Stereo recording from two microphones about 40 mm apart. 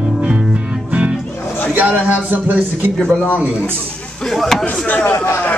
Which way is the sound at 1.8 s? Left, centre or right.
Right.